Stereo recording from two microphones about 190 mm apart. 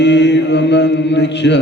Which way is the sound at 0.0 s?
65° left (ahead or behind).